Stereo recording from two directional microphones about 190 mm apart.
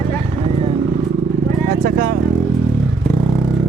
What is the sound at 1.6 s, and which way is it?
Speech, 50° right (ahead or behind).